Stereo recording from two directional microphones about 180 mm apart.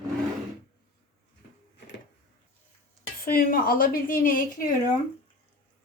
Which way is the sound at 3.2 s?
50° left (ahead or behind).